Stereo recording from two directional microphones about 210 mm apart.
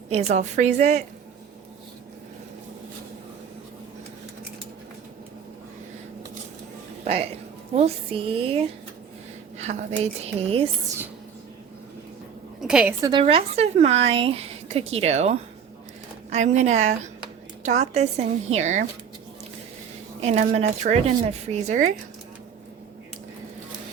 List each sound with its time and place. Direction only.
0.1 s speech: 30° right (ahead or behind)
7.0 s speech: 30° right (ahead or behind)
12.6 s a woman's voice: 5° right (ahead or behind)
13.0 s speech: 20° right (ahead or behind)
20.2 s speech: 30° right (ahead or behind)